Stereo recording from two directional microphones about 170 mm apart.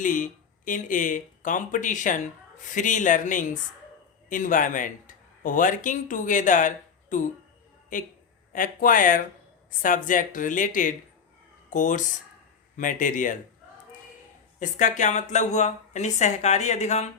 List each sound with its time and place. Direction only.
0.0 s speech: 50° left (ahead or behind)
8.5 s speech: 50° left (ahead or behind)
14.6 s speech: 45° left (ahead or behind)